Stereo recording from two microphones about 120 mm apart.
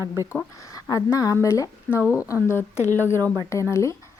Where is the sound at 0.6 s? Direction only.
30° left (ahead or behind).